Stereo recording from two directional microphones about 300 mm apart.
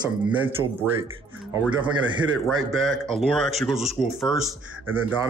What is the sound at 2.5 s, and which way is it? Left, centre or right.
Speech, right.